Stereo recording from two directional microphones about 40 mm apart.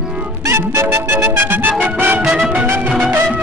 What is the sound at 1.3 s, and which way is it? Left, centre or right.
Speech, right.